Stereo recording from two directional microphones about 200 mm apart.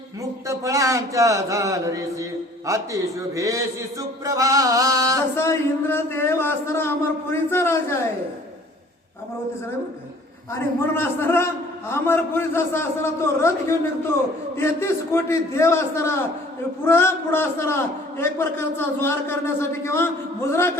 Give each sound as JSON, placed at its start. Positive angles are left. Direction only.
{"t": 0.2, "sound": "a man's voice", "side_deg": -15}
{"t": 5.4, "sound": "a man's voice", "side_deg": 10}
{"t": 10.5, "sound": "a man's voice", "side_deg": 10}